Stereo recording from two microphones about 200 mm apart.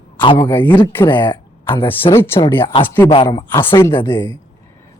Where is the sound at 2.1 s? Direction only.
10° left (ahead or behind).